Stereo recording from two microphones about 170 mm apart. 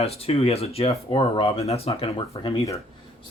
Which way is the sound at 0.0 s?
35° left (ahead or behind).